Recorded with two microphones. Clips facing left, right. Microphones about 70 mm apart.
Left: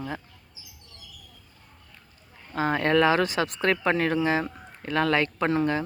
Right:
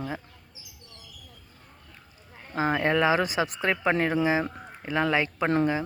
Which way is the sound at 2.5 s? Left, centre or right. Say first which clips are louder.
Left 2 dB; centre.